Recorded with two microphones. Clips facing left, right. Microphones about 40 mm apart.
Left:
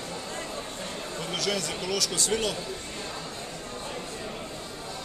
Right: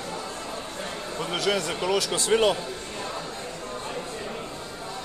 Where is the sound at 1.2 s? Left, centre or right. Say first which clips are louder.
Right 5 dB; centre.